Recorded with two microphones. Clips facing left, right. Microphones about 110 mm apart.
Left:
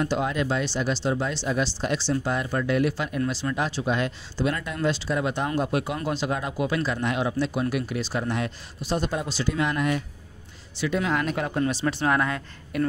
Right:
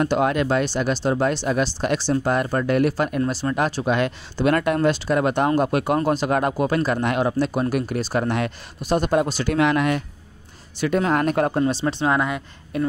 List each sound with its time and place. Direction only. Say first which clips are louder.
0.0 s speech: right 5 dB; 60° right (ahead or behind)
3.2 s speech: right 4 dB; 40° right (ahead or behind); by 4.7 s 65° right (ahead or behind)
4.7 s speech: right 6 dB; 55° right (ahead or behind)
5.9 s speech: right 7 dB; 50° right (ahead or behind); by 10.0 s 75° right (ahead or behind)
10.8 s speech: right 5 dB; 50° right (ahead or behind)
11.5 s speech: right 4 dB; 30° right (ahead or behind)